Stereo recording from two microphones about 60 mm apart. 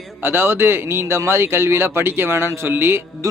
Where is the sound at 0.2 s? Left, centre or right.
Right.